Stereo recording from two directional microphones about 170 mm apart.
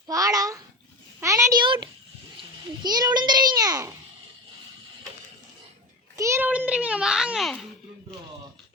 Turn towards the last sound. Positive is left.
turn(degrees=0)  # may be behind; listen again after turning